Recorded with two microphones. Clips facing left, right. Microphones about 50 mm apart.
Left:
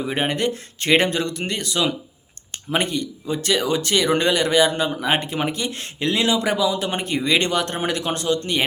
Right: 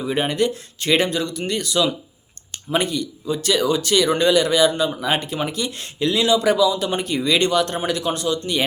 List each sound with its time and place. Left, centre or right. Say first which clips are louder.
0.1 s speech: right 3 dB; left